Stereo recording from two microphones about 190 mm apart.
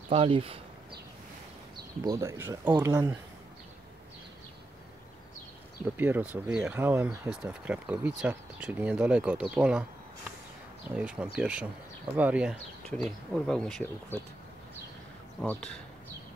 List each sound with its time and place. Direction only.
0.1 s speech: 30° right (ahead or behind)
2.0 s speech: 15° right (ahead or behind)
5.9 s speech: 10° right (ahead or behind)
11.0 s speech: 5° right (ahead or behind)
15.4 s speech: 5° left (ahead or behind)